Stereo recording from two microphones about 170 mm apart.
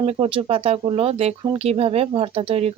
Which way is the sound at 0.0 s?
35° right (ahead or behind).